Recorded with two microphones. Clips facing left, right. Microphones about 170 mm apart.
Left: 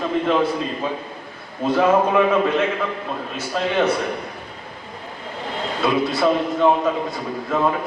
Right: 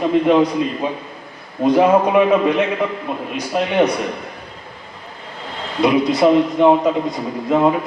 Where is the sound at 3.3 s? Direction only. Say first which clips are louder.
Right 4 dB; 15° right (ahead or behind).